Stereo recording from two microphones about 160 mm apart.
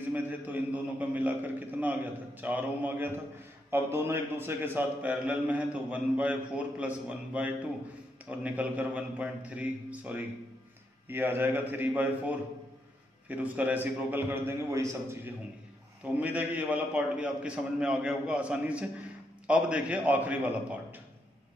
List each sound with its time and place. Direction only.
0.1 s a man's voice: 10° right (ahead or behind)